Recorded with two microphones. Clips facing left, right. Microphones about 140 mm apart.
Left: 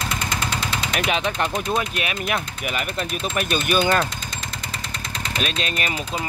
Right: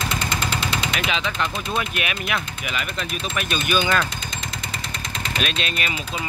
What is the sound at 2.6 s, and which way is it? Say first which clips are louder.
Speech: left 2 dB; 45° left (ahead or behind).